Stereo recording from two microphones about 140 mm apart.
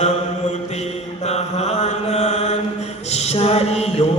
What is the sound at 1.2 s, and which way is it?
Mantra, 50° left (ahead or behind).